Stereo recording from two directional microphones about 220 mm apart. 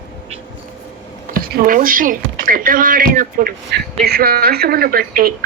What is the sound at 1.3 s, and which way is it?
Speech, 40° right (ahead or behind).